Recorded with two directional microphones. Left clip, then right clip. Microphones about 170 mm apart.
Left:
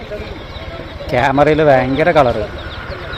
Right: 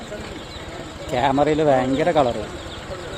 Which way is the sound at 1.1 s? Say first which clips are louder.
Left 7 dB; 5° right (ahead or behind).